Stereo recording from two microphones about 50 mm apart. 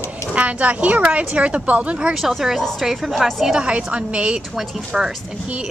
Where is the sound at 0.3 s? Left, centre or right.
Right.